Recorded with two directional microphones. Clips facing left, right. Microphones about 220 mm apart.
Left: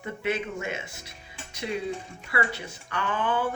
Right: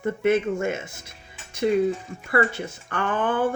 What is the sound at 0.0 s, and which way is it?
Speech, 50° right (ahead or behind).